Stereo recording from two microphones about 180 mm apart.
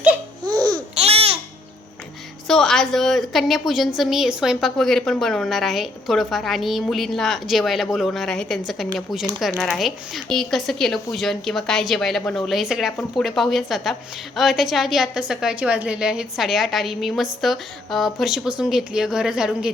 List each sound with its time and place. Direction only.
0.5 s babbling: 25° right (ahead or behind)
0.9 s babbling: 35° right (ahead or behind)
2.5 s a woman's voice: 5° left (ahead or behind)